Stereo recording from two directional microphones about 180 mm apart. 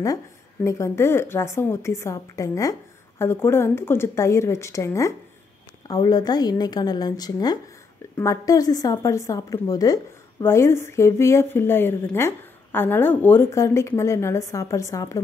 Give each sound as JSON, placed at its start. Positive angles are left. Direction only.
{"t": 0.7, "sound": "a woman's voice", "side_deg": 15}